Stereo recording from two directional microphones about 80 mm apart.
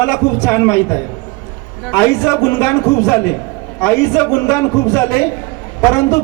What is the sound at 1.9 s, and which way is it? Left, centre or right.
A man's voice, left.